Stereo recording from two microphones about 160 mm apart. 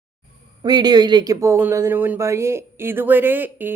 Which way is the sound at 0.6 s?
25° right (ahead or behind).